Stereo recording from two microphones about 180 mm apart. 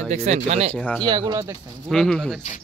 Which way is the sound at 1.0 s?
25° right (ahead or behind).